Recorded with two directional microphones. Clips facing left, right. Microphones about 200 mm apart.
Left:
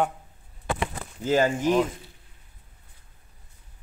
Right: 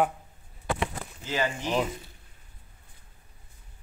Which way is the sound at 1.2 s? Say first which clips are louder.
Left 8 dB; 45° left (ahead or behind).